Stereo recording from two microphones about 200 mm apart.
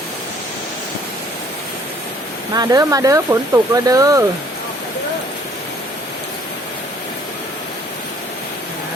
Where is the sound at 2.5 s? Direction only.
20° right (ahead or behind).